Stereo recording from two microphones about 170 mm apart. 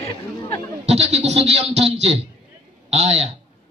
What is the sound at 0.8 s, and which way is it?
A man's voice, 40° right (ahead or behind).